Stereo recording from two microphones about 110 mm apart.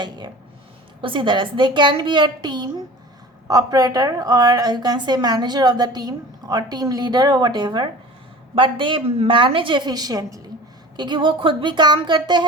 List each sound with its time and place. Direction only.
0.2 s a woman's voice: 40° right (ahead or behind)